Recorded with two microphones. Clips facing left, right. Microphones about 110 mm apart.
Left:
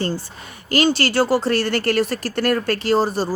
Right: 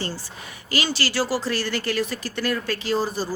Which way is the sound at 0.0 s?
50° left (ahead or behind).